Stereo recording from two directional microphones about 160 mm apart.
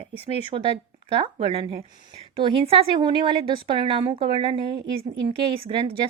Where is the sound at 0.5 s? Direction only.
35° right (ahead or behind).